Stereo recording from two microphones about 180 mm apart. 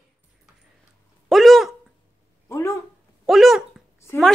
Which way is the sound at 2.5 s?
15° left (ahead or behind).